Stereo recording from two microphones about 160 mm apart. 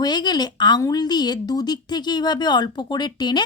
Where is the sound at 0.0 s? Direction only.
25° left (ahead or behind).